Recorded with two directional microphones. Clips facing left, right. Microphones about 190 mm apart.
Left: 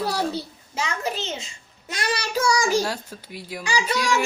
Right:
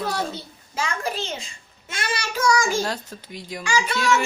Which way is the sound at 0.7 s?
20° left (ahead or behind).